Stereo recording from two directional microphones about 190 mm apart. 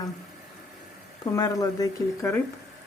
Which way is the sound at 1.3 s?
20° left (ahead or behind).